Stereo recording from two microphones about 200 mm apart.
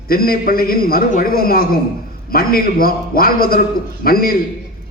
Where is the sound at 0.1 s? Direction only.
45° left (ahead or behind).